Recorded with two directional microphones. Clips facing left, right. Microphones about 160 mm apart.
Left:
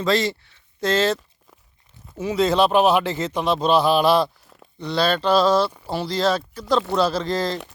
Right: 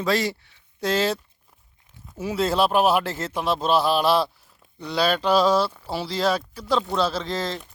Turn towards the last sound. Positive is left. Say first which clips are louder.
# left 4 dB
turn(degrees=0)  # may be behind; listen again after turning